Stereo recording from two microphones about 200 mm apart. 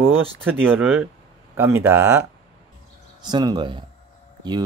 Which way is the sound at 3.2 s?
20° right (ahead or behind).